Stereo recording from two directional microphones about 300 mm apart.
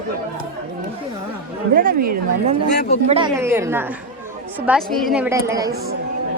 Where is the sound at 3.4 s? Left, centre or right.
Centre.